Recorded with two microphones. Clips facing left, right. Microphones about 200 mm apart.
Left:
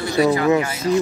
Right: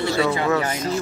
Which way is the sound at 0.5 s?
10° left (ahead or behind).